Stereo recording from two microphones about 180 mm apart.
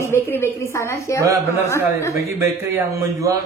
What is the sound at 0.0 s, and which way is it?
A woman's voice, 15° left (ahead or behind).